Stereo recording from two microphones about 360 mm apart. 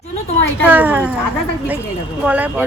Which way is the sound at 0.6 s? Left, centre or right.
Centre.